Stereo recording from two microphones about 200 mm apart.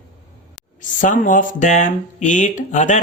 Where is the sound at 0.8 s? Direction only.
40° left (ahead or behind).